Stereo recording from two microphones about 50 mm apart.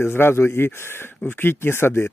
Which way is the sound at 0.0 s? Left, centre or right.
Left.